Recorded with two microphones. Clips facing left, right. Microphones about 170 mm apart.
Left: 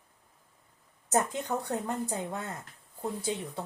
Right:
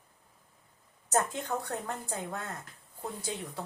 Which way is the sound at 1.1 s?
15° left (ahead or behind).